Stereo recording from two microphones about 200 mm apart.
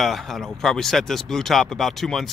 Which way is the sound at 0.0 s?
Centre (ahead or behind).